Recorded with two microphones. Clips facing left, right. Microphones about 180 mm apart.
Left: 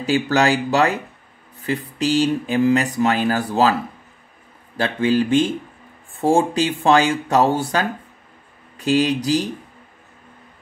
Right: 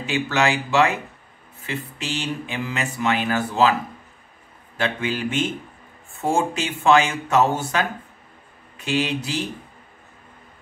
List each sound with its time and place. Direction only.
0.0 s speech: 35° left (ahead or behind)
4.7 s speech: 35° left (ahead or behind)